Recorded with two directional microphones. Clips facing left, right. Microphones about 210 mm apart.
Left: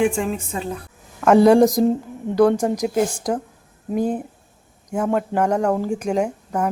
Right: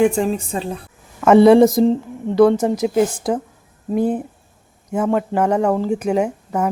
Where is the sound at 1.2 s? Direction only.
5° right (ahead or behind).